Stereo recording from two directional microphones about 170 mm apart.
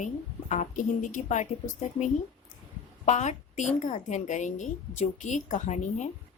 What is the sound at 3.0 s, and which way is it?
A woman's voice, 40° left (ahead or behind).